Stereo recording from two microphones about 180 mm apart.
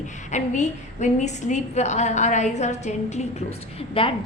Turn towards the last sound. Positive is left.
turn(degrees=30)  # may be behind; listen again after turning